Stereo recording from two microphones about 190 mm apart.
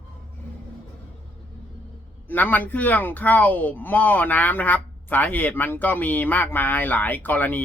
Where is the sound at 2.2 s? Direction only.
10° left (ahead or behind).